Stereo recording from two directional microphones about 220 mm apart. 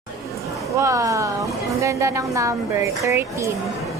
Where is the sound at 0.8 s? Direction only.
15° right (ahead or behind).